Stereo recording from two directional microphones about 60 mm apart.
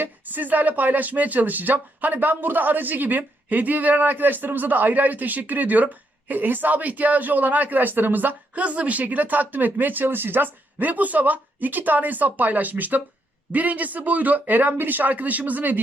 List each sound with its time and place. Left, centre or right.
0.0 s speech: right